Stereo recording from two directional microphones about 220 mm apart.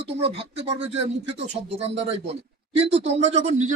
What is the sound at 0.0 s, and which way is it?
Speech, 25° right (ahead or behind).